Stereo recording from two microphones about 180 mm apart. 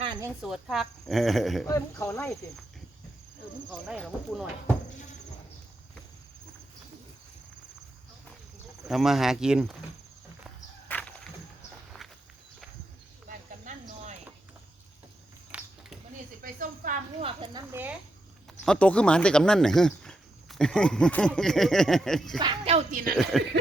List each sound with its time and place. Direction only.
0.4 s speech: centre (ahead or behind)
1.6 s speech: 15° left (ahead or behind)
3.7 s speech: 5° right (ahead or behind)
8.8 s speech: centre (ahead or behind)
10.8 s a sound: 10° left (ahead or behind)
13.2 s cricket: 40° right (ahead or behind)
15.5 s a sound: 5° right (ahead or behind)
16.4 s speech: 50° right (ahead or behind)
17.2 s speech: 30° right (ahead or behind)
17.7 s speech: 10° right (ahead or behind)
18.6 s speech: 5° left (ahead or behind)
22.4 s speech: 30° right (ahead or behind)
22.9 s speech: 50° right (ahead or behind)
23.1 s speech: centre (ahead or behind)